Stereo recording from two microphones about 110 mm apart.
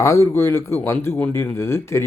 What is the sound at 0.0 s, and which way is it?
Speech, 25° left (ahead or behind).